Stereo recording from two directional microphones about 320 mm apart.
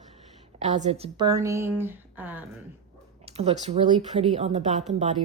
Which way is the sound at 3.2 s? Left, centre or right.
Centre.